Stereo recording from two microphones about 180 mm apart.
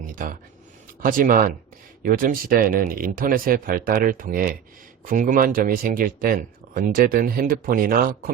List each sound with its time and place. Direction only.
1.0 s speech: 50° right (ahead or behind)